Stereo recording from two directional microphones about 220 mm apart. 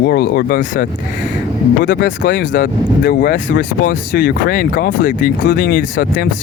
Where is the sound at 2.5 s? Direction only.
40° left (ahead or behind).